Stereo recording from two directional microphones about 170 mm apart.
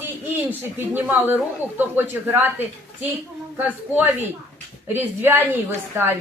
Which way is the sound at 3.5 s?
10° right (ahead or behind).